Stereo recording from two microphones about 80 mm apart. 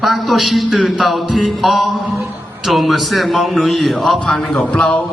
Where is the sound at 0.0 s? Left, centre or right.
Centre.